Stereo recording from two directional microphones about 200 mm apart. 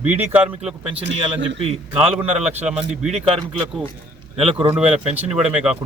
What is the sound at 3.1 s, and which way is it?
Speech, 25° right (ahead or behind).